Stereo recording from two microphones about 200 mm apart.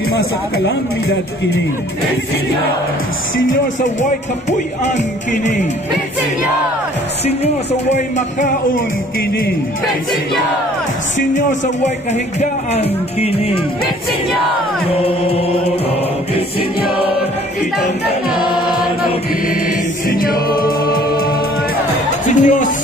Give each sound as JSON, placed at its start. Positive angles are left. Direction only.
{"t": 4.5, "sound": "speech", "side_deg": 35}
{"t": 7.9, "sound": "speech", "side_deg": 40}
{"t": 11.3, "sound": "speech", "side_deg": 35}
{"t": 15.0, "sound": "music", "side_deg": 30}
{"t": 20.1, "sound": "choir", "side_deg": 45}
{"t": 22.2, "sound": "music", "side_deg": 40}